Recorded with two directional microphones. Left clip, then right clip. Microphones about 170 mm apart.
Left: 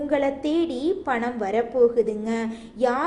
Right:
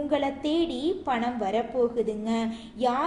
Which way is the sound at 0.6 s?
40° left (ahead or behind).